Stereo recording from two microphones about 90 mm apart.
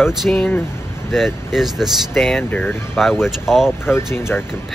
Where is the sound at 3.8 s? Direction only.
25° left (ahead or behind).